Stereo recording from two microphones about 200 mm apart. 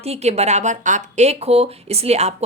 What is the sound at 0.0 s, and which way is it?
Speech, 30° right (ahead or behind).